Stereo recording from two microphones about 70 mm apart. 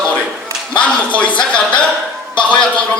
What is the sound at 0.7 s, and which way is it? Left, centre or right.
Speech, centre.